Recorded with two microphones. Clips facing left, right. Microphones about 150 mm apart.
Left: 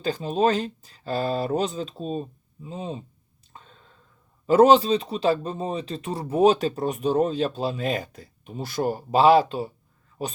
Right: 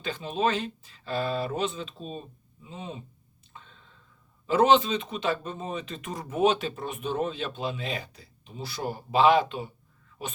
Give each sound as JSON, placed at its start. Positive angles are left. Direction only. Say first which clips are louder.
{"t": 0.0, "sound": "speech", "louder": "left 5 dB", "side_deg": 40}
{"t": 3.5, "sound": "a sound", "louder": "left 2 dB", "side_deg": 40}
{"t": 4.4, "sound": "speech", "louder": "left 5 dB", "side_deg": 40}